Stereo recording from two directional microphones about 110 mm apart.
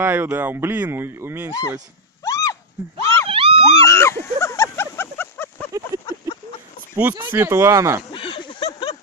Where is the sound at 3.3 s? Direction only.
60° right (ahead or behind).